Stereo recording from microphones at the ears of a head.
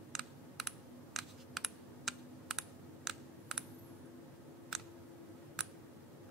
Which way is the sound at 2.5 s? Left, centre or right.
Right.